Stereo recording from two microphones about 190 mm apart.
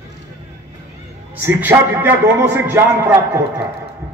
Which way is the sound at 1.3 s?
10° right (ahead or behind).